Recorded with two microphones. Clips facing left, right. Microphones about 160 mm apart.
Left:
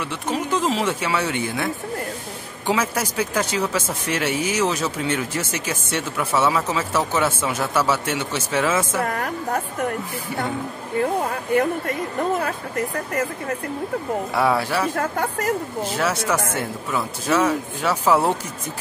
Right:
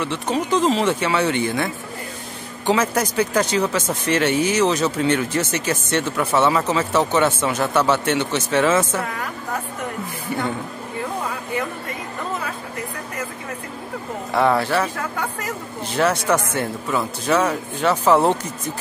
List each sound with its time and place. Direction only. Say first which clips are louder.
0.0 s speech: right 3 dB; 5° left (ahead or behind)
9.0 s a sound: left 4 dB; 50° left (ahead or behind)
11.0 s speech: left 5 dB; 50° left (ahead or behind)
14.3 s speech: right 4 dB; 5° left (ahead or behind)
15.0 s speech: left 3 dB; 50° left (ahead or behind)
16.0 s speech: right 5 dB; 5° left (ahead or behind)